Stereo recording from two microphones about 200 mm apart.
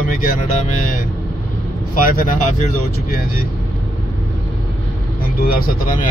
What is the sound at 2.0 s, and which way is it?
Speech, 45° left (ahead or behind).